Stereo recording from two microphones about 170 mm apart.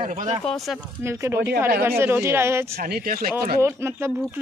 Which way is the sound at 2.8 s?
65° right (ahead or behind).